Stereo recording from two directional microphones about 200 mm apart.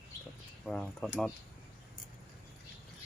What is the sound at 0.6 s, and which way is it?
Speech, 5° left (ahead or behind).